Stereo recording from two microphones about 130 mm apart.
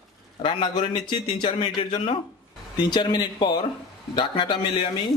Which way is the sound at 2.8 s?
30° left (ahead or behind).